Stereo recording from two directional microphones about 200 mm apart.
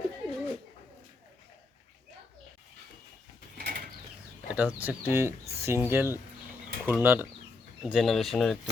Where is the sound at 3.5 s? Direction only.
50° right (ahead or behind).